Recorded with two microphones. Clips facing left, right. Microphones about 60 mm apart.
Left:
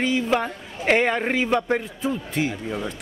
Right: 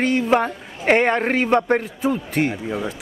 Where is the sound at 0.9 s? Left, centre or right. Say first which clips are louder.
Right 3 dB; right.